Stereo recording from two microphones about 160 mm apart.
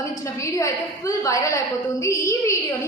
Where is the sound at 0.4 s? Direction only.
20° left (ahead or behind).